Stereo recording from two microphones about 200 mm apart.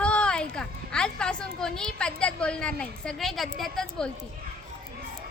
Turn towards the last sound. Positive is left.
turn(degrees=5)  # may be behind; listen again after turning